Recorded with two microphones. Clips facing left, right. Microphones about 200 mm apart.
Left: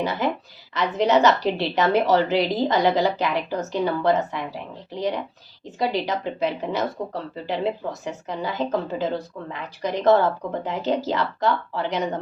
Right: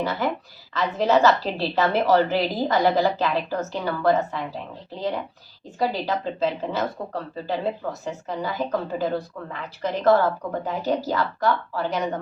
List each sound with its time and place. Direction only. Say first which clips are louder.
0.0 s a woman's voice: left 1 dB; 20° left (ahead or behind)